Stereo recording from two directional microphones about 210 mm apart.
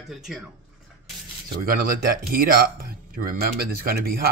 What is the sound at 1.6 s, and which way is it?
Speech, 45° right (ahead or behind).